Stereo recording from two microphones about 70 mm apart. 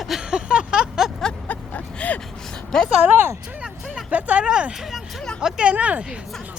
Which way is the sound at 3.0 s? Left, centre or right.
Right.